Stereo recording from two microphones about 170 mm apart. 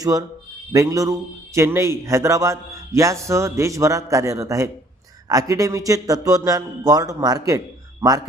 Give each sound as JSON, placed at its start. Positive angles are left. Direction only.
{"t": 0.0, "sound": "a man's voice", "side_deg": -20}